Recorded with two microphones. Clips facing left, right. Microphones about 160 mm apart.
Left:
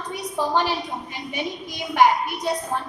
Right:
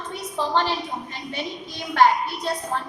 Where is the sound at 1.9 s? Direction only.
15° left (ahead or behind).